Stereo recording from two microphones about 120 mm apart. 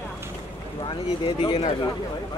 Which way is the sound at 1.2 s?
45° left (ahead or behind).